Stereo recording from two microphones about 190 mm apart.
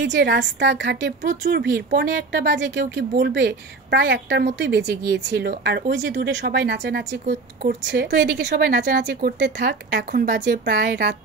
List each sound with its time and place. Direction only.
0.0 s speech: 65° right (ahead or behind)
1.2 s speech: 45° right (ahead or behind)
1.6 s speech: 65° right (ahead or behind)